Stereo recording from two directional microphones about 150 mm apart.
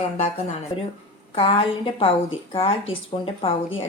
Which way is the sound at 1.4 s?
35° left (ahead or behind).